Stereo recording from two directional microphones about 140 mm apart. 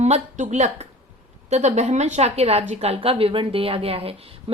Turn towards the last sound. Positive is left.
turn(degrees=-45)  # may be behind; listen again after turning